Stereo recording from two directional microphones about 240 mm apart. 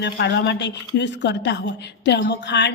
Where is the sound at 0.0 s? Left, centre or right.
Left.